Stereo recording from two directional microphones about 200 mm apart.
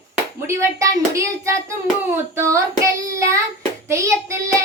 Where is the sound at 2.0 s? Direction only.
10° right (ahead or behind).